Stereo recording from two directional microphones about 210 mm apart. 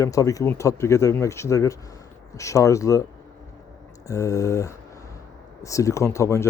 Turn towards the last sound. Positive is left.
turn(degrees=15)  # may be behind; listen again after turning